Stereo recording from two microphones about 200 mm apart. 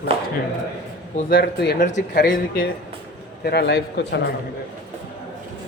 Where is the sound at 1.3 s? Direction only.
55° left (ahead or behind).